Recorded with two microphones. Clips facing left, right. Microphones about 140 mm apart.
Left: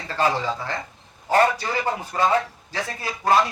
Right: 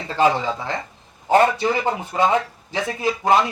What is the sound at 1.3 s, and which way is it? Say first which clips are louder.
A man's voice: right 3 dB; 20° right (ahead or behind).